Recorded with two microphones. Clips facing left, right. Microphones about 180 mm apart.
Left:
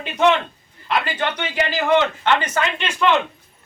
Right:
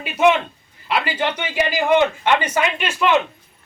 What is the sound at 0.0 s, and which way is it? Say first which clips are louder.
Speech: right 1 dB; 10° right (ahead or behind).